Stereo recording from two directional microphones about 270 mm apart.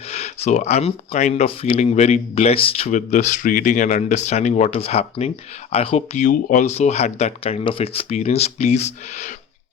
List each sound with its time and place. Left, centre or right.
0.1 s speech: left